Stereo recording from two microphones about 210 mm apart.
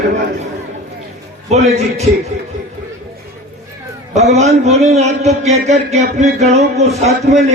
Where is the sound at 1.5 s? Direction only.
30° right (ahead or behind).